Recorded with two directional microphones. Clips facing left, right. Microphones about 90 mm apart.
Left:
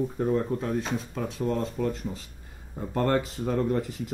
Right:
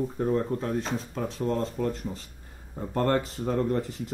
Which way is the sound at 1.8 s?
40° right (ahead or behind).